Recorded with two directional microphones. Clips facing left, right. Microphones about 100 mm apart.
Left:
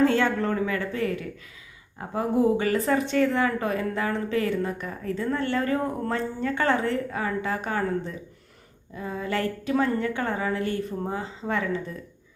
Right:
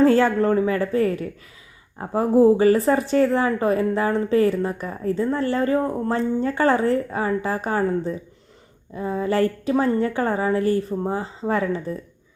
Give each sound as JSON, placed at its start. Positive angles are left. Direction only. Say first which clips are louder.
{"t": 0.0, "sound": "a woman's voice", "louder": "right 5 dB", "side_deg": -35}